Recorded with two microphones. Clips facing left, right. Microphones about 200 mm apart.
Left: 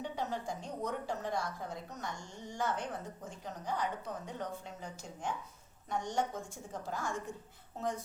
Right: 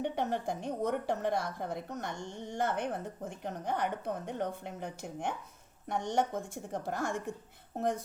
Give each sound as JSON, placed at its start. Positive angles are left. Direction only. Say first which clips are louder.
{"t": 0.0, "sound": "a woman's voice", "louder": "right 5 dB", "side_deg": -60}